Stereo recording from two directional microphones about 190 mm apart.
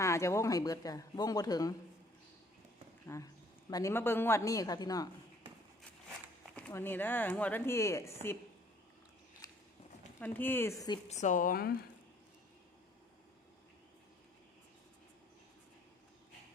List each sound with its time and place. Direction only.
0.0 s speech: 15° left (ahead or behind)
3.1 s speech: 15° left (ahead or behind)
6.6 s speech: 10° left (ahead or behind)
10.2 s speech: 10° left (ahead or behind)
11.1 s a woman's voice: 40° left (ahead or behind)